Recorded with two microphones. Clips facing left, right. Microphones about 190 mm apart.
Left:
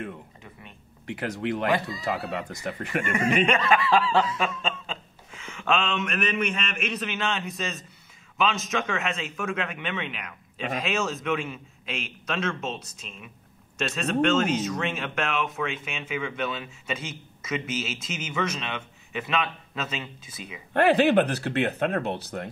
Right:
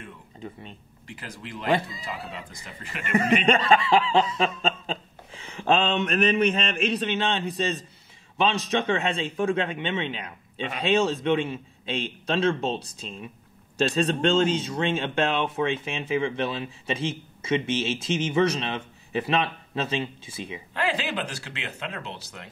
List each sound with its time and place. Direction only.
1.0 s speech: 70° left (ahead or behind)
3.2 s speech: 35° right (ahead or behind)
3.9 s a sound: 15° right (ahead or behind)
4.4 s speech: 35° right (ahead or behind)
20.7 s speech: 60° left (ahead or behind)